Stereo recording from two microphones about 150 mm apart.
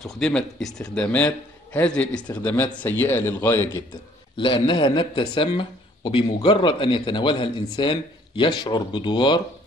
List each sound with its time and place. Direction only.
0.0 s a man's voice: 5° left (ahead or behind)
4.4 s speech: 30° left (ahead or behind)